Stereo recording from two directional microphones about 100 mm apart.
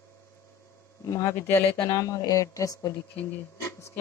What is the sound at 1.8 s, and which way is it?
Speech, 35° left (ahead or behind).